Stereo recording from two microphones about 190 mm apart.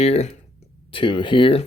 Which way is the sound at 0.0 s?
35° left (ahead or behind).